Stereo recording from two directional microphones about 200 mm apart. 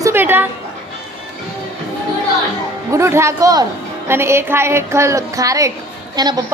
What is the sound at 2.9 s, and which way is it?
A woman's voice, 15° right (ahead or behind).